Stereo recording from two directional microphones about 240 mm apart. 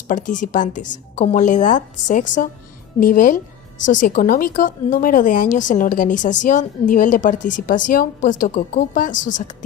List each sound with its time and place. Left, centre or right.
0.1 s a woman's voice: left